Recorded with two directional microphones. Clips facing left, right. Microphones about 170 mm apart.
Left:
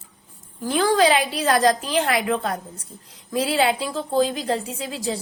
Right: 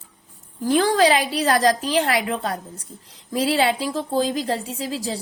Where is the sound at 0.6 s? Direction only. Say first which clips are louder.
Right 1 dB; 40° right (ahead or behind).